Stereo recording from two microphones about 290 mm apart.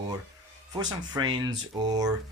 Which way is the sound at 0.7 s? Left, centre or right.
Centre.